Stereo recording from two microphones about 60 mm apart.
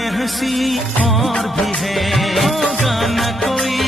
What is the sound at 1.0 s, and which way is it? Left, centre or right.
Music of bollywood, centre.